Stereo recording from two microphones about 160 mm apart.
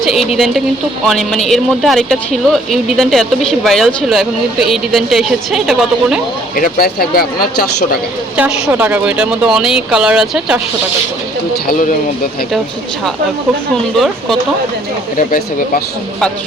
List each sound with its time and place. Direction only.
0.0 s speech: centre (ahead or behind)
6.6 s speech: 75° left (ahead or behind)
8.4 s speech: 5° right (ahead or behind)
11.7 s speech: 60° left (ahead or behind)